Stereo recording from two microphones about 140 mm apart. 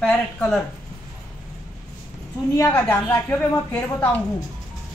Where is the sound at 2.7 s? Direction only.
10° left (ahead or behind).